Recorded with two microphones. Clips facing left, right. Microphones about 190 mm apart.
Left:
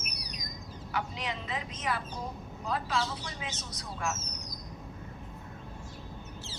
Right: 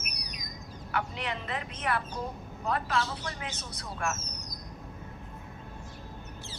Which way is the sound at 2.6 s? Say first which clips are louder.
Right 2 dB; 60° right (ahead or behind).